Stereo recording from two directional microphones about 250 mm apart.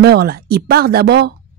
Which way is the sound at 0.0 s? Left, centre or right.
Right.